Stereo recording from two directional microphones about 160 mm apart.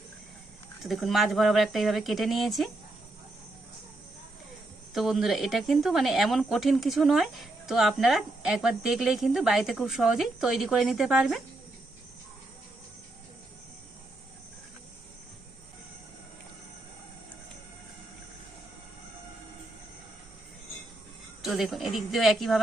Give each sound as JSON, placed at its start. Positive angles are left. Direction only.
{"t": 0.8, "sound": "a woman's voice", "side_deg": 0}
{"t": 4.9, "sound": "a woman's voice", "side_deg": 0}
{"t": 21.4, "sound": "a woman's voice", "side_deg": 0}